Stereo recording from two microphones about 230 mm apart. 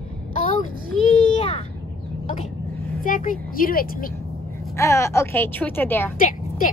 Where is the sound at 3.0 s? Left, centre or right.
Left.